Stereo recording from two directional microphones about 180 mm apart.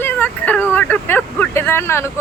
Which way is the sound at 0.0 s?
10° left (ahead or behind).